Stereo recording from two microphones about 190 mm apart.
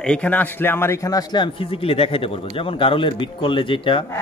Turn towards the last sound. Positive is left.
turn(degrees=25)  # may be behind; listen again after turning